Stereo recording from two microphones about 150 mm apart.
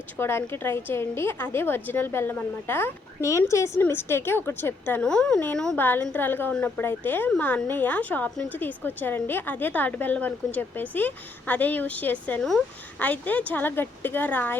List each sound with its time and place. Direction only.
0.2 s a woman's voice: 15° left (ahead or behind)